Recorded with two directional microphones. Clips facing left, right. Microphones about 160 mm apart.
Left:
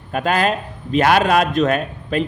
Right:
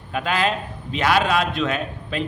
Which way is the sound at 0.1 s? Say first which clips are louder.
Left 4 dB; 45° left (ahead or behind).